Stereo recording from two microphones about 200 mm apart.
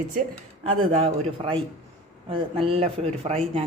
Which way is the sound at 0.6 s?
30° right (ahead or behind).